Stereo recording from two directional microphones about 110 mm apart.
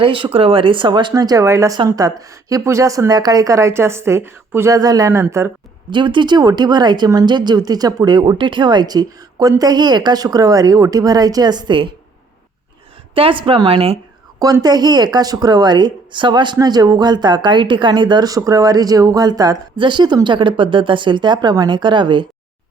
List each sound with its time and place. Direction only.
0.0 s speech: 50° right (ahead or behind)
1.1 s a woman's voice: 35° right (ahead or behind)
5.9 s speech: 45° right (ahead or behind)
13.1 s a woman's voice: 55° right (ahead or behind)
14.3 s speech: 35° right (ahead or behind)